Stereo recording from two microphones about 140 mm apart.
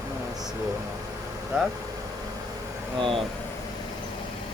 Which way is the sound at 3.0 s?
40° right (ahead or behind).